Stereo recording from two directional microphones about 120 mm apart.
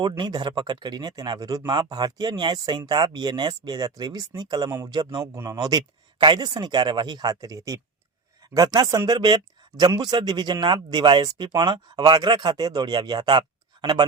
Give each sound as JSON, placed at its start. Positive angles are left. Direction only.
{"t": 0.2, "sound": "a man's voice", "side_deg": -35}